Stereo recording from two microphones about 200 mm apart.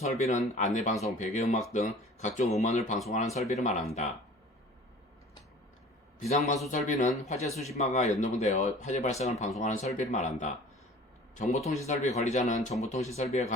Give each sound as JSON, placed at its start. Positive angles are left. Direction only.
{"t": 0.0, "sound": "speech", "side_deg": 35}
{"t": 6.1, "sound": "speech", "side_deg": 35}